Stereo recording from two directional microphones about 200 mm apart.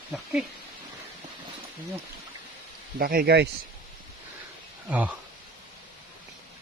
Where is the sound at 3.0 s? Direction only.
50° right (ahead or behind).